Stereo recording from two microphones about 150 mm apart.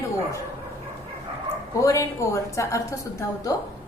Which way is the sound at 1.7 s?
20° left (ahead or behind).